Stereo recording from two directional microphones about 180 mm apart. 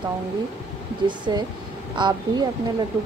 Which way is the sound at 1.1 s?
25° right (ahead or behind).